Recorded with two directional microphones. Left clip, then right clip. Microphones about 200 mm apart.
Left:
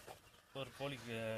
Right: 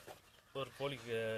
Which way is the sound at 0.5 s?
30° right (ahead or behind).